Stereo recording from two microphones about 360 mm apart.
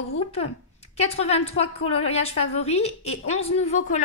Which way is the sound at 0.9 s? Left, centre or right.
Centre.